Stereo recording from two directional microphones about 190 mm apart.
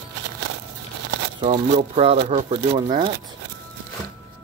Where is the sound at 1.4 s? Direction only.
35° right (ahead or behind).